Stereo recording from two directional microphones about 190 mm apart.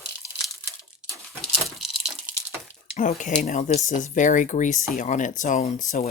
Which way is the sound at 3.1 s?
40° left (ahead or behind).